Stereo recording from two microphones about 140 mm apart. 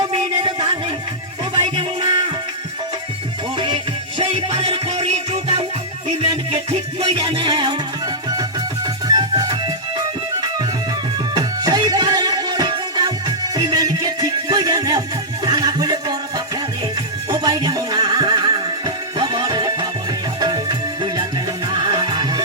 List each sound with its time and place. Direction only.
0.1 s music: 35° right (ahead or behind)
4.2 s music: 35° right (ahead or behind)
9.0 s music: 30° right (ahead or behind)
11.3 s music: 25° right (ahead or behind)
17.2 s music: 30° right (ahead or behind)